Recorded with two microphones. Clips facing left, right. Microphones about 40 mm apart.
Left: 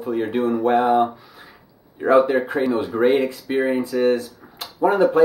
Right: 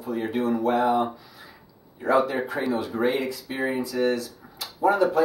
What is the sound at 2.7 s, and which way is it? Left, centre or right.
Speech, left.